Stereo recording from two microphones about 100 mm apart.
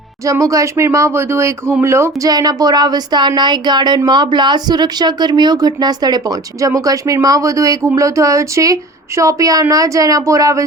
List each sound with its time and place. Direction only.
0.3 s speech: 35° right (ahead or behind)
2.3 s speech: 40° right (ahead or behind)